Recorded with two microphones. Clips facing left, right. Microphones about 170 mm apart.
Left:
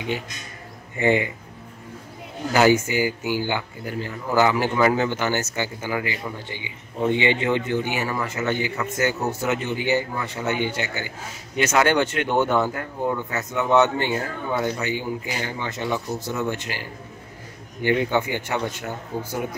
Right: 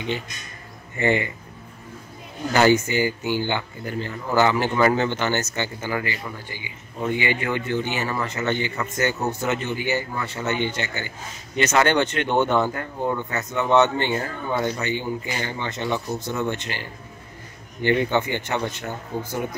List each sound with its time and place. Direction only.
0.9 s speech: 15° left (ahead or behind)
2.5 s speech: 10° left (ahead or behind)
17.8 s speech: 10° left (ahead or behind)